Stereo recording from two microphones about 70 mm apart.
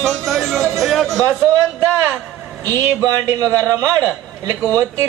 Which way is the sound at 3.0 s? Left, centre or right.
Right.